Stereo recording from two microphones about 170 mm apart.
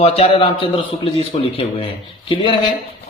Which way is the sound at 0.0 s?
35° left (ahead or behind).